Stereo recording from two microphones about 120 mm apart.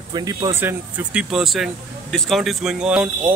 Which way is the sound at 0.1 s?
30° right (ahead or behind).